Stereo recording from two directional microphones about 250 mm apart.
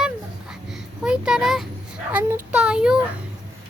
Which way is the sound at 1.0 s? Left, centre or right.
Centre.